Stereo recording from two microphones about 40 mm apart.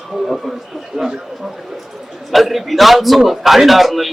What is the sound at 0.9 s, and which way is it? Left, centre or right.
Speech, right.